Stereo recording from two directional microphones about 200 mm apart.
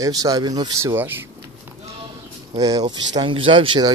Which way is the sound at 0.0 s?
15° right (ahead or behind).